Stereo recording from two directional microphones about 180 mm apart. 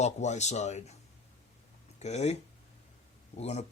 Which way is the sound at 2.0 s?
40° left (ahead or behind).